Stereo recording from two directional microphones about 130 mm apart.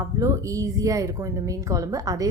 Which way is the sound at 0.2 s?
25° right (ahead or behind).